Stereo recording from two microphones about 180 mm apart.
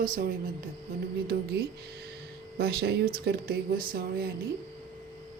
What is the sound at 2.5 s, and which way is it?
A woman's voice, 60° right (ahead or behind).